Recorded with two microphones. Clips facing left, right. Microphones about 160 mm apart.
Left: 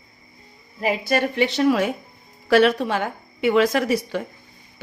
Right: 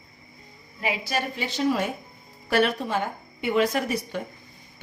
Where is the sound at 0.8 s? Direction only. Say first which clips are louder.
Left 7 dB; 45° left (ahead or behind); by 4.2 s 90° left.